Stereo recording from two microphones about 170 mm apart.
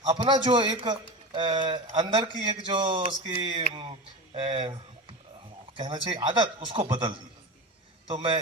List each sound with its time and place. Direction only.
0.0 s a man's voice: 25° right (ahead or behind)